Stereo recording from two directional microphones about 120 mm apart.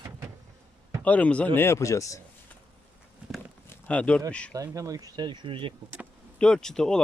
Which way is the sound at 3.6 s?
15° left (ahead or behind).